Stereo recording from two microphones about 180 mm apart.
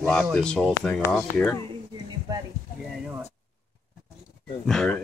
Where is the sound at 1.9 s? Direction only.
20° right (ahead or behind).